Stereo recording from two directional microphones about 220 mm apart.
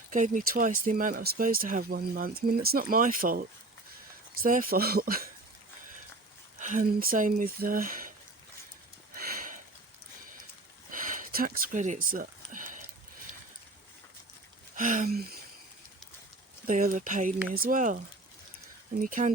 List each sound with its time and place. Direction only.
0.1 s speech: 35° right (ahead or behind)
4.4 s speech: 40° right (ahead or behind)
6.6 s speech: 35° right (ahead or behind)
9.1 s sniff: 40° right (ahead or behind)
10.9 s a sound: 35° right (ahead or behind)
14.8 s speech: 35° right (ahead or behind)
16.6 s speech: 35° right (ahead or behind)
19.0 s speech: 35° right (ahead or behind)